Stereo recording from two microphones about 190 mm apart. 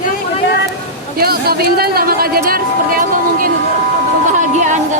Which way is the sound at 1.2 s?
55° right (ahead or behind).